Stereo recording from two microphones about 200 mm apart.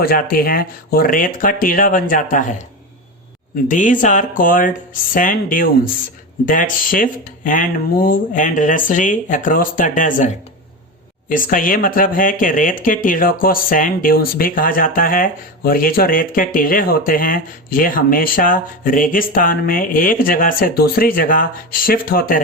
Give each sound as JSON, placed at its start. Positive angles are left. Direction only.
{"t": 0.0, "sound": "speech", "side_deg": 50}
{"t": 3.7, "sound": "speech", "side_deg": 40}